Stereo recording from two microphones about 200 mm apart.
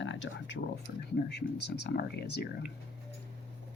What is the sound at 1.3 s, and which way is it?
Speech, 55° left (ahead or behind).